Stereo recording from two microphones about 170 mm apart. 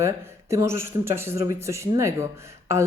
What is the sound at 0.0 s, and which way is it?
Speech, 15° right (ahead or behind).